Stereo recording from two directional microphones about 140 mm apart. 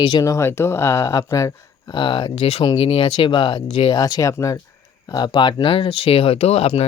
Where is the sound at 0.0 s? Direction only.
30° left (ahead or behind).